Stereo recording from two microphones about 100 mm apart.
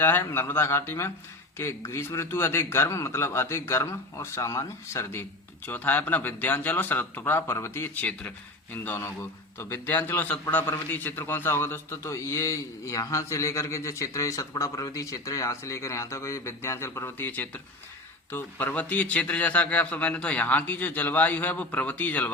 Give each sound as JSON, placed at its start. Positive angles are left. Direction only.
{"t": 0.0, "sound": "a man's voice", "side_deg": 20}